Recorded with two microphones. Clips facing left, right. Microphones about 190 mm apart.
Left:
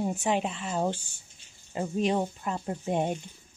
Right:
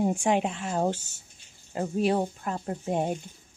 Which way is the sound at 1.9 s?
5° right (ahead or behind).